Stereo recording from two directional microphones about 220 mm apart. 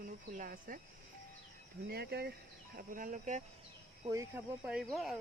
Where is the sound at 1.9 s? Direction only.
45° right (ahead or behind).